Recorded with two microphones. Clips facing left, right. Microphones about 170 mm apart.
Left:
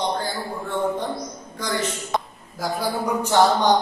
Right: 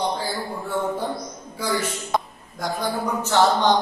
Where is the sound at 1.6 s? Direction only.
10° right (ahead or behind).